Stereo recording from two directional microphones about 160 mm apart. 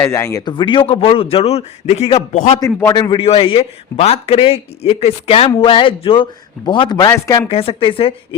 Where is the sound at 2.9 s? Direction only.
30° left (ahead or behind).